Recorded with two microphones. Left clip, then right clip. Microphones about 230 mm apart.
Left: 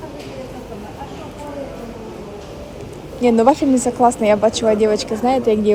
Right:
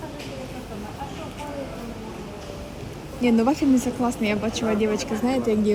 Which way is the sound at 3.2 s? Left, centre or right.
Centre.